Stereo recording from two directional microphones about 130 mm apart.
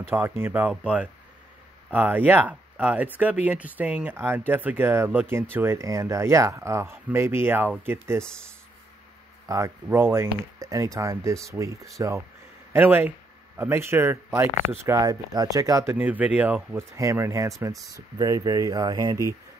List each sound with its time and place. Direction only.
0.1 s speech: 15° right (ahead or behind)
9.8 s speech: 15° right (ahead or behind)
16.9 s speech: 25° right (ahead or behind)